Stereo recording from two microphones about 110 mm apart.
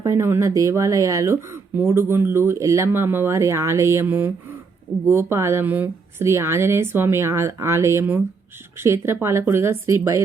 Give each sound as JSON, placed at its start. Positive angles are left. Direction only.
{"t": 0.0, "sound": "speech", "side_deg": -25}